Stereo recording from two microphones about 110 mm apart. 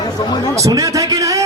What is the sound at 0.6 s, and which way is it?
Music, 30° right (ahead or behind).